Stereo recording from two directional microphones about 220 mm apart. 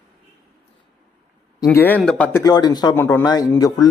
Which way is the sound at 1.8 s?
5° left (ahead or behind).